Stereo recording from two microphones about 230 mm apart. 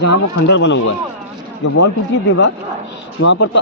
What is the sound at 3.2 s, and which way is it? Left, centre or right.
Speech, left.